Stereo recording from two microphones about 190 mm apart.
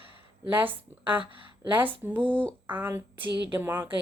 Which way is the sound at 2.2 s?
5° left (ahead or behind).